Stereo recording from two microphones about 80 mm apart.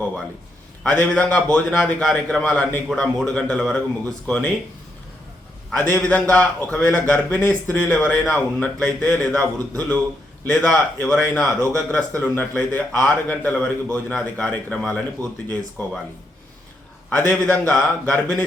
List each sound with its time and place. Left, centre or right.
0.9 s a man's voice: centre
6.0 s a man's voice: centre
17.1 s a man's voice: centre